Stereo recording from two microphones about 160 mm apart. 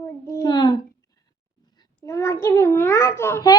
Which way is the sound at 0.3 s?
20° left (ahead or behind).